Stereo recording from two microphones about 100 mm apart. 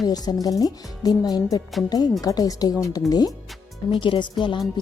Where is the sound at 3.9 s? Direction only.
55° left (ahead or behind).